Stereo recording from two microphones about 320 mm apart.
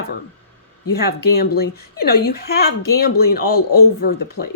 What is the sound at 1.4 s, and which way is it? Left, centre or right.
Speech, left.